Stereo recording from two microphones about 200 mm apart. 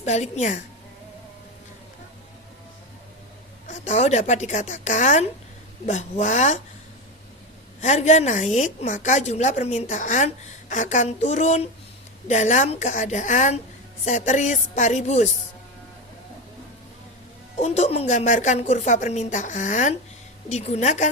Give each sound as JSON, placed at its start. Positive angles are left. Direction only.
{"t": 0.0, "sound": "a woman's voice", "side_deg": 35}
{"t": 3.7, "sound": "a woman's voice", "side_deg": 35}
{"t": 7.8, "sound": "a woman's voice", "side_deg": 35}
{"t": 17.6, "sound": "a woman's voice", "side_deg": 35}